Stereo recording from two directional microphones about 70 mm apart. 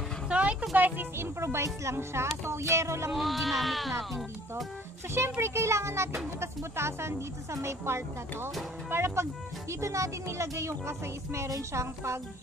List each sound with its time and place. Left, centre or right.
0.3 s music: centre
0.7 s speech: right
3.1 s speech: centre
5.4 s speech: right